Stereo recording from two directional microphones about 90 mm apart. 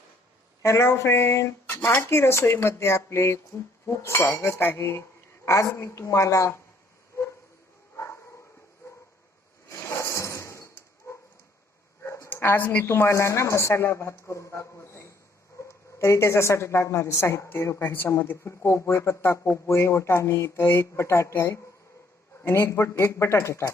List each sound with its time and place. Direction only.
0.6 s speech: 30° left (ahead or behind)
7.9 s dog: 30° left (ahead or behind)
9.6 s a sound: 30° left (ahead or behind)
11.1 s dog: 30° left (ahead or behind)
12.0 s a sound: 35° left (ahead or behind)
12.3 s a woman's voice: 25° left (ahead or behind)